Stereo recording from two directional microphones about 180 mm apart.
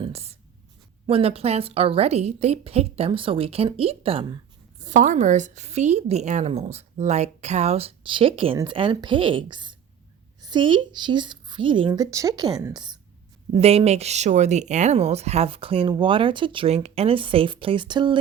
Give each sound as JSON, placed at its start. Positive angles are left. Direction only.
{"t": 0.0, "sound": "writing", "side_deg": -35}
{"t": 1.0, "sound": "speech", "side_deg": -30}
{"t": 4.8, "sound": "a woman's voice", "side_deg": -45}
{"t": 13.5, "sound": "speech", "side_deg": -35}